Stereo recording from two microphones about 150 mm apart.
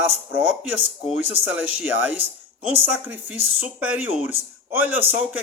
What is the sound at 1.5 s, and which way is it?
Speech, 10° right (ahead or behind).